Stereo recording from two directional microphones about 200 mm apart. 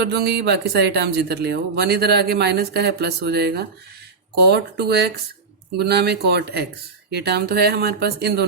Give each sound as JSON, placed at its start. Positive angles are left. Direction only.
{"t": 0.0, "sound": "speech", "side_deg": -55}